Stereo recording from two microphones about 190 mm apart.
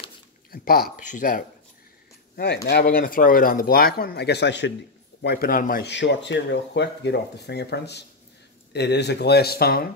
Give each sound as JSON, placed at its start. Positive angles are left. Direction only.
{"t": 0.5, "sound": "a sound", "side_deg": 50}
{"t": 1.0, "sound": "speech", "side_deg": 45}
{"t": 2.3, "sound": "speech", "side_deg": 60}
{"t": 5.2, "sound": "speech", "side_deg": 55}
{"t": 5.9, "sound": "speech", "side_deg": 70}